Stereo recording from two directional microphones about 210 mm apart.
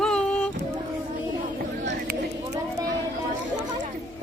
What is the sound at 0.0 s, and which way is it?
Music, 5° left (ahead or behind).